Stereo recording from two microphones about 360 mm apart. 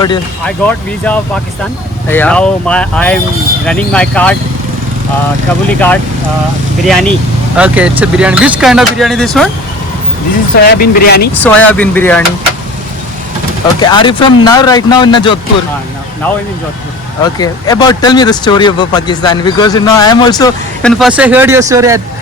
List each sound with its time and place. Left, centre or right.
0.0 s speech: centre
5.6 s speech: centre
10.5 s speech: left
11.4 s speech: centre
13.7 s speech: centre
17.4 s speech: centre